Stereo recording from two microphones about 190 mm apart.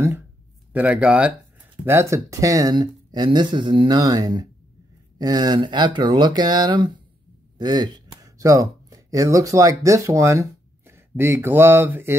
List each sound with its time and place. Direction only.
0.7 s speech: 5° right (ahead or behind); by 7.0 s 25° right (ahead or behind)
7.5 s a sound: 20° right (ahead or behind)
8.9 s speech: 20° right (ahead or behind)